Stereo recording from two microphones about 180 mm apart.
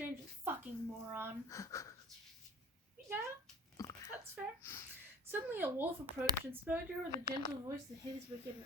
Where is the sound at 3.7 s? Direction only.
20° left (ahead or behind).